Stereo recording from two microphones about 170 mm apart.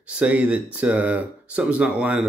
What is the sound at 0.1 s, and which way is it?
Speech, 5° right (ahead or behind).